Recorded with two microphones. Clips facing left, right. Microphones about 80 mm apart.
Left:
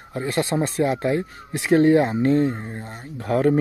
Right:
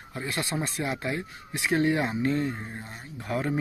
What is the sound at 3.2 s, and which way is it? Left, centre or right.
Speech, left.